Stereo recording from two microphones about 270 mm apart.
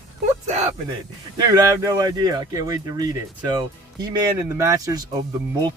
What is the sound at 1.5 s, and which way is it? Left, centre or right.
Speech, centre.